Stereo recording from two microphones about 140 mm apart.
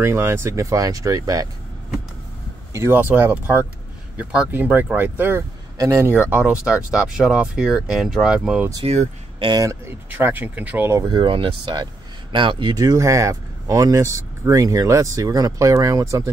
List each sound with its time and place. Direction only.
0.0 s speech: 20° right (ahead or behind)
2.7 s speech: 15° right (ahead or behind)
8.8 s speech: 55° right (ahead or behind)
9.4 s speech: 30° right (ahead or behind)
10.1 s speech: 10° right (ahead or behind)
11.1 s speech: 40° right (ahead or behind)